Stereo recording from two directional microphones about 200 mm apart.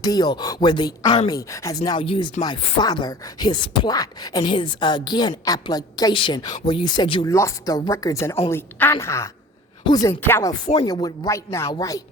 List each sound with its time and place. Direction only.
0.0 s speech: 20° left (ahead or behind)